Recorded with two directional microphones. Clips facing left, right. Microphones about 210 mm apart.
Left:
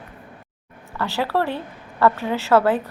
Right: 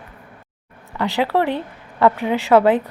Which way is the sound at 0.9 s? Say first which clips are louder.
Right 4 dB; 15° right (ahead or behind).